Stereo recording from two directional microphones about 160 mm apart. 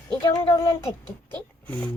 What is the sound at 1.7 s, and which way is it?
Speech, 10° left (ahead or behind).